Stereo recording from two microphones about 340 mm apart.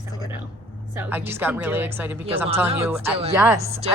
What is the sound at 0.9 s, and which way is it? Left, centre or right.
A woman's voice, centre.